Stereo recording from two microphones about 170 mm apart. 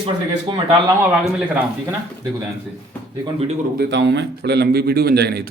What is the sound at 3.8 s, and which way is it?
A man's voice, 90° right.